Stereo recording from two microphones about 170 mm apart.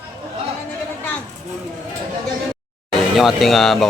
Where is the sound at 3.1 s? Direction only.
Centre (ahead or behind).